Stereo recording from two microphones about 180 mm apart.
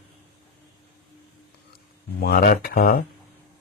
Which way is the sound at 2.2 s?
55° left (ahead or behind).